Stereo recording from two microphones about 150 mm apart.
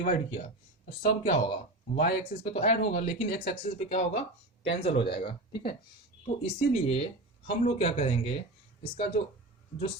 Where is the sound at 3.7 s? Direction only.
40° left (ahead or behind).